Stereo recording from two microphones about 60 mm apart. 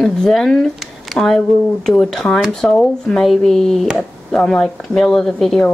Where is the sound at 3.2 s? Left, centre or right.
Centre.